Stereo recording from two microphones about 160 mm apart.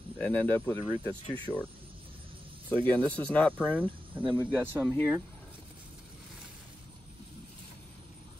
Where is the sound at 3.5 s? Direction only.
10° right (ahead or behind).